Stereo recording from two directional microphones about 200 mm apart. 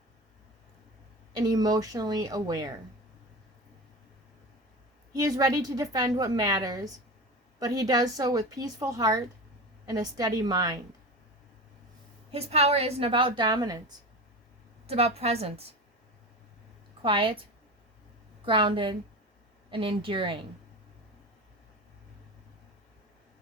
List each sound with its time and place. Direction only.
1.4 s a woman's voice: 20° right (ahead or behind)
5.1 s a woman's voice: 20° right (ahead or behind)
12.3 s a woman's voice: 30° right (ahead or behind)
14.8 s a woman's voice: 30° right (ahead or behind)
17.0 s a woman's voice: 25° right (ahead or behind)
18.4 s a woman's voice: 25° right (ahead or behind)